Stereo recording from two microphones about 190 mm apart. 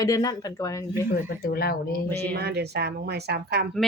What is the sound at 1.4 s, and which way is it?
Speech, 50° left (ahead or behind).